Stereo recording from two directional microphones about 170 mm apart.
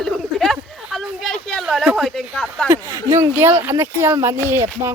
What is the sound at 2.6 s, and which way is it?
Speech, 15° right (ahead or behind).